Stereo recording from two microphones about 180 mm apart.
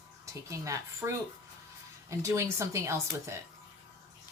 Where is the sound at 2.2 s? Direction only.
15° right (ahead or behind).